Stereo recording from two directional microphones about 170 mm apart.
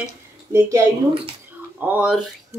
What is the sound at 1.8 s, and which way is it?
Speech, 5° right (ahead or behind).